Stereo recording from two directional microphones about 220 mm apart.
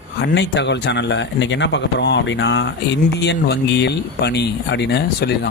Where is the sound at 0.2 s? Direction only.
55° left (ahead or behind).